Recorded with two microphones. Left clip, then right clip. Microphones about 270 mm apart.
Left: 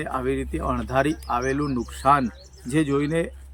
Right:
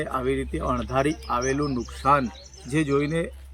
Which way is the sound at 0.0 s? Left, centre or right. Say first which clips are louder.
Even; centre.